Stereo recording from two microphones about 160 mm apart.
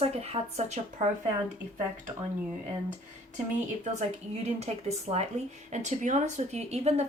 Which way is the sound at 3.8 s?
45° right (ahead or behind).